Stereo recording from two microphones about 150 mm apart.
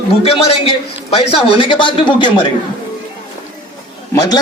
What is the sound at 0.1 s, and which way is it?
A man's voice, 40° left (ahead or behind).